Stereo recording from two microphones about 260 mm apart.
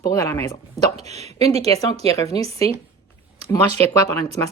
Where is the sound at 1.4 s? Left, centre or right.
Right.